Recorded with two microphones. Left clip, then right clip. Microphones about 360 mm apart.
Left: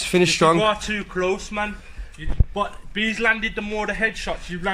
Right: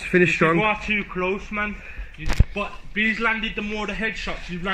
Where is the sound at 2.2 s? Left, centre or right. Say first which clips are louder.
Right 6 dB; left.